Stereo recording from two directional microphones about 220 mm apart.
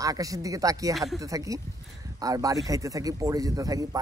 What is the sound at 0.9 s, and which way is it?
Speech, centre (ahead or behind).